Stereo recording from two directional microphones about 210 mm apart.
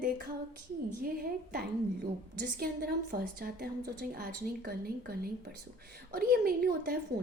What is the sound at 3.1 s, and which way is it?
A woman's voice, 45° right (ahead or behind).